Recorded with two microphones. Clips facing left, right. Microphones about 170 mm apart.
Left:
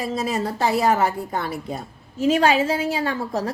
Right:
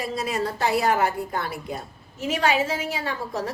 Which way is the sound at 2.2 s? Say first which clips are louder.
Left 5 dB; 30° left (ahead or behind).